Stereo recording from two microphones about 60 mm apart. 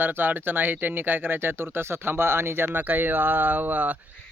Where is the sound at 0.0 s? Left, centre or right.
Right.